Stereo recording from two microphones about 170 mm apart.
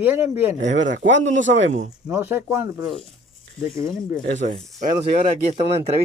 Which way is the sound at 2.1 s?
15° right (ahead or behind).